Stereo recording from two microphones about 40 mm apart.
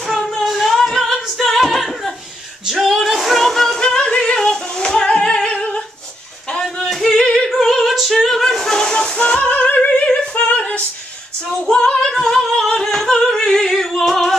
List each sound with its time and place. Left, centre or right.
0.4 s singing: centre
0.9 s music: centre
2.6 s a sound: centre
3.3 s singing: centre
3.9 s singing: centre
6.9 s yodeling: centre
7.5 s a sound: centre
7.9 s music: centre; by 9.7 s left
10.4 s a sound: left
11.7 s female singing: centre
12.0 s singing: centre
12.6 s opera: centre
12.9 s singing: centre